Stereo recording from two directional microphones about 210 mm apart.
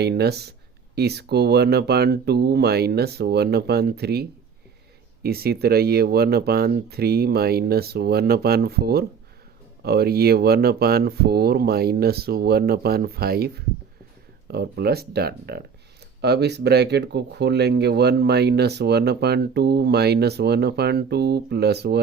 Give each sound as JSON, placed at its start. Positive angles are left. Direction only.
{"t": 0.0, "sound": "speech", "side_deg": -50}